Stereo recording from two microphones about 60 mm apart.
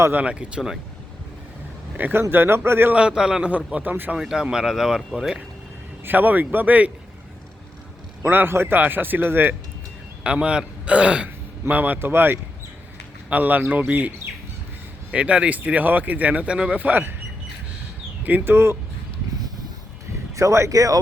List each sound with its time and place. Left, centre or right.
0.1 s speech: right
2.0 s speech: right
2.9 s speech: centre
3.8 s speech: right
4.2 s speech: centre
6.1 s speech: right
8.2 s speech: right
10.2 s speech: centre
15.1 s speech: right
18.4 s speech: right
20.3 s speech: right